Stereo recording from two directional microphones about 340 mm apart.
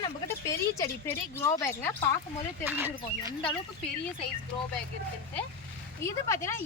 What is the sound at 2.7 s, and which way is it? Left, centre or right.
Speech, centre.